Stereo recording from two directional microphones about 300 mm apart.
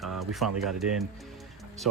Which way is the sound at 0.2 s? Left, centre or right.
Centre.